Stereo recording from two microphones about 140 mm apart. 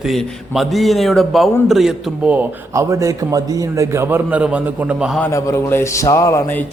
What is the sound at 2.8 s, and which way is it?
A man's voice, 20° right (ahead or behind).